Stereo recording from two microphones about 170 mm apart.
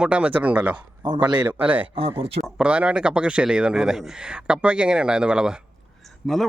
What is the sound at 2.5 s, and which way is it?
A man's voice, 5° right (ahead or behind).